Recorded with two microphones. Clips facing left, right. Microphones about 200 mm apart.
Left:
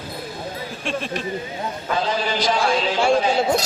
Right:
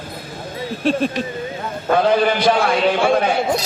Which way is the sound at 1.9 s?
60° right (ahead or behind).